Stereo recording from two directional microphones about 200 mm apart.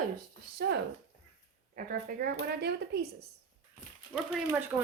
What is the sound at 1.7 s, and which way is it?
Speech, 45° right (ahead or behind).